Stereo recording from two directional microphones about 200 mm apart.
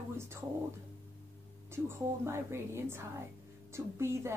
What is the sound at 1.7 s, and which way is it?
A woman's voice, 10° right (ahead or behind).